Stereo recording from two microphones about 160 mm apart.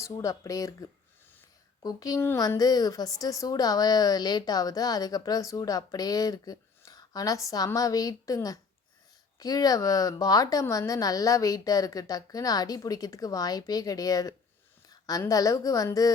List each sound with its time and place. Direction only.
0.0 s a woman's voice: 20° left (ahead or behind)